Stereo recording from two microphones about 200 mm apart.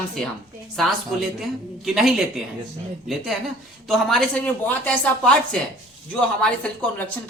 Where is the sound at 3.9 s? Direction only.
Centre (ahead or behind).